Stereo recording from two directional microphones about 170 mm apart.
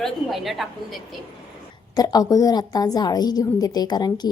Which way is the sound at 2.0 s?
20° left (ahead or behind).